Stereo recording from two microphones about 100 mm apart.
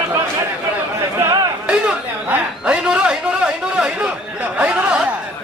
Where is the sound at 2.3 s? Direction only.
10° right (ahead or behind).